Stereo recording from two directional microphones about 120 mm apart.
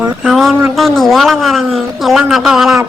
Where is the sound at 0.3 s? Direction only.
Centre (ahead or behind).